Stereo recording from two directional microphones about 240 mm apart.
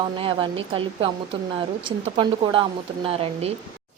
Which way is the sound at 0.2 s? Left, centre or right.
Centre.